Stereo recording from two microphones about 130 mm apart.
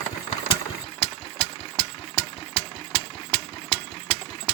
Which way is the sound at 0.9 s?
45° left (ahead or behind).